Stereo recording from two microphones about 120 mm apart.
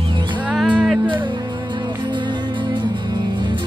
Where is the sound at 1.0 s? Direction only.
40° right (ahead or behind).